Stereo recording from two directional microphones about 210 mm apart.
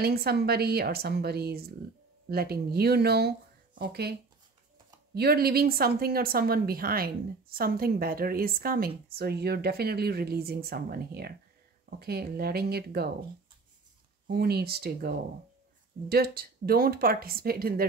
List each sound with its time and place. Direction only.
0.0 s a woman's voice: 50° right (ahead or behind)
14.2 s a woman's voice: 50° right (ahead or behind)